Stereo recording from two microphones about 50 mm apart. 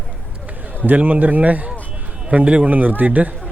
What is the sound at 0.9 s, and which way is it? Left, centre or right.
Speech, right.